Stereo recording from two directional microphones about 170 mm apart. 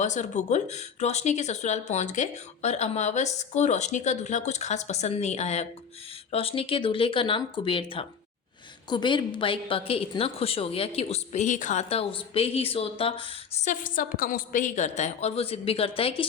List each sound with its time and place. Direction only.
0.0 s a woman's voice: 45° left (ahead or behind)
13.7 s speech: 55° left (ahead or behind); by 16.2 s 35° left (ahead or behind)